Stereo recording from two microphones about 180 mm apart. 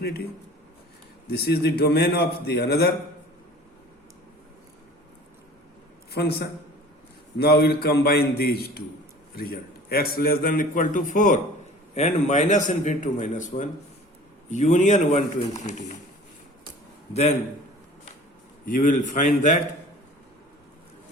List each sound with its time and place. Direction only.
1.3 s a man's voice: 65° left (ahead or behind)
6.1 s a man's voice: 65° left (ahead or behind); by 16.0 s 40° left (ahead or behind)
18.6 s a man's voice: 50° left (ahead or behind)